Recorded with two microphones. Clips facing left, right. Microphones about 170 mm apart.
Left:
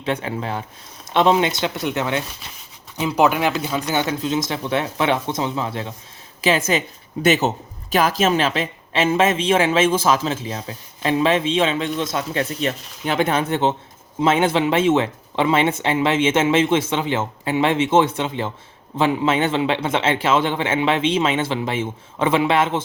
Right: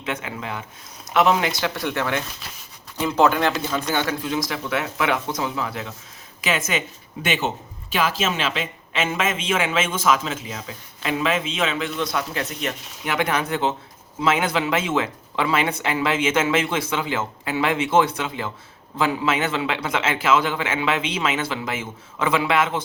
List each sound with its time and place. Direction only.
0.0 s speech: 30° left (ahead or behind)